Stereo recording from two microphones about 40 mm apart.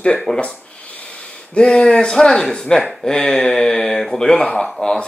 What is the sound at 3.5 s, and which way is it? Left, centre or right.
Speech, centre.